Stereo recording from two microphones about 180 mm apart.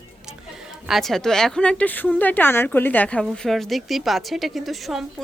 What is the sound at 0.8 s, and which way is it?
A woman's voice, centre (ahead or behind).